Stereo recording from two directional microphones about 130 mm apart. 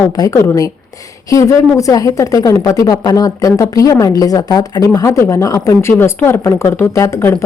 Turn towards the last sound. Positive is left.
turn(degrees=20)  # may be behind; listen again after turning